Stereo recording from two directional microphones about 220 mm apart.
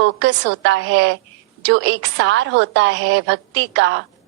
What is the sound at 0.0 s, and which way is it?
A woman's voice, 55° right (ahead or behind).